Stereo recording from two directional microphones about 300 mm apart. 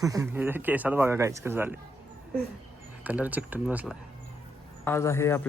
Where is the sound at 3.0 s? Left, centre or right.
Centre.